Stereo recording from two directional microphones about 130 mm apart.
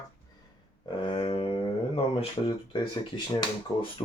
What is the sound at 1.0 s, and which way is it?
Speech, 40° left (ahead or behind).